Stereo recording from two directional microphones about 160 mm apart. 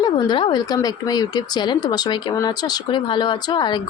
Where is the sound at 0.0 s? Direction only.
30° left (ahead or behind).